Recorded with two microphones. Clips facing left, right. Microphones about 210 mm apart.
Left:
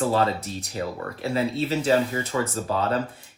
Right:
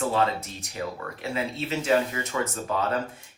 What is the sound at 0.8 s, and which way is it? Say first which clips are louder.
Speech: left 2 dB; 35° left (ahead or behind).